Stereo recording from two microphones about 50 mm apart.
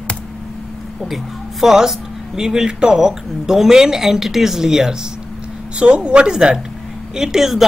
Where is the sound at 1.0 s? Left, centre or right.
Centre.